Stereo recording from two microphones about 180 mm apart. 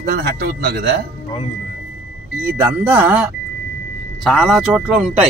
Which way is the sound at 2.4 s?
10° right (ahead or behind).